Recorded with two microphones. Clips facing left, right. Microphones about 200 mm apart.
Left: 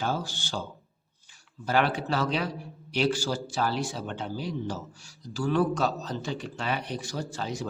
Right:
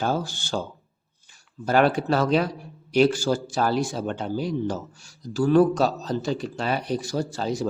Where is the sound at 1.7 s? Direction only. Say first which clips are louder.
Right 6 dB; 45° right (ahead or behind).